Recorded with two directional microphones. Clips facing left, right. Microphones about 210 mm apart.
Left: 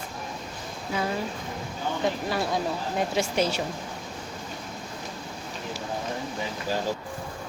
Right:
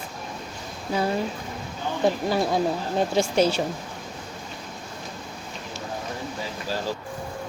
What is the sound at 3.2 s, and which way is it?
Speech, 30° right (ahead or behind).